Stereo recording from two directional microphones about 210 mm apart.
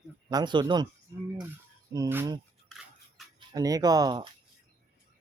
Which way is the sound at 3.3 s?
15° right (ahead or behind).